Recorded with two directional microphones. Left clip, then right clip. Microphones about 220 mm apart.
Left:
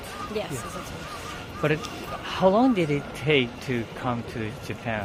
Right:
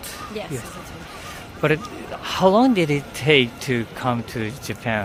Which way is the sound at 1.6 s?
40° right (ahead or behind).